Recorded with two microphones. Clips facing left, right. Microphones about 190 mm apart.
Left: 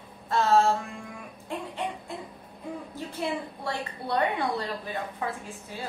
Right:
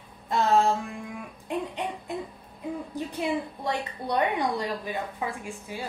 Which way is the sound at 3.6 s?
15° right (ahead or behind).